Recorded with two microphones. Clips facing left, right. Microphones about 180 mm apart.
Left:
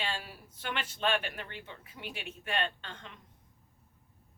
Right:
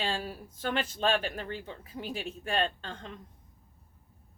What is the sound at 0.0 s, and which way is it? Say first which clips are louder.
Speech: right 5 dB; 40° right (ahead or behind).